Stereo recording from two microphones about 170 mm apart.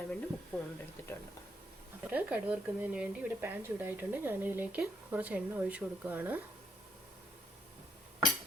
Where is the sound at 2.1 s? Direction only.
10° right (ahead or behind).